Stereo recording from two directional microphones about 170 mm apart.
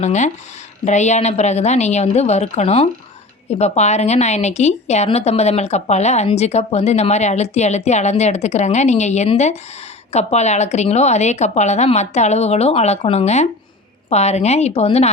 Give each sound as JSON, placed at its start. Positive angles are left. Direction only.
{"t": 0.0, "sound": "a woman's voice", "side_deg": 45}